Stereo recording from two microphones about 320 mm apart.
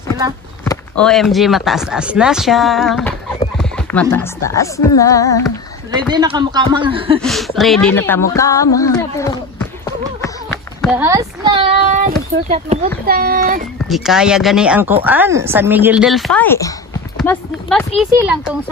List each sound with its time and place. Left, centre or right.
0.7 s speech: centre
5.9 s speech: centre
7.2 s speech: centre; by 13.7 s right
13.8 s speech: centre